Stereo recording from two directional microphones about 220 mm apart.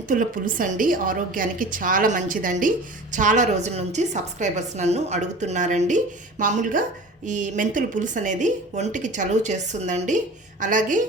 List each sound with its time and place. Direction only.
0.1 s a woman's voice: 40° right (ahead or behind)